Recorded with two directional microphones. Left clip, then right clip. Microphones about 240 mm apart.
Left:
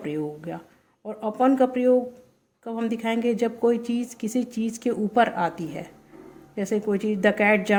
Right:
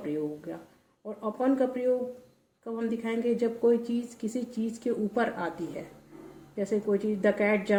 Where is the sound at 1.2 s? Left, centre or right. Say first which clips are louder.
Left 7 dB; left.